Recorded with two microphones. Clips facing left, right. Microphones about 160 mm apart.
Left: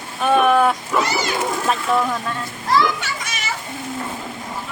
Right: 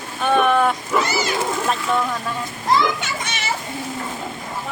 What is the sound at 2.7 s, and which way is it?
Speech, 20° right (ahead or behind).